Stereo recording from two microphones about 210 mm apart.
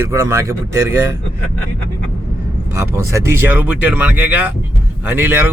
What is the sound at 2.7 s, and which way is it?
A man's voice, 15° right (ahead or behind).